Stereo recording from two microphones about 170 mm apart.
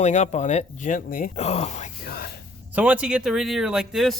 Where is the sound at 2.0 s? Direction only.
65° left (ahead or behind).